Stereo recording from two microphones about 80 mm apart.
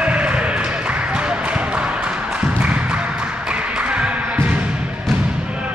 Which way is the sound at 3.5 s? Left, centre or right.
Centre.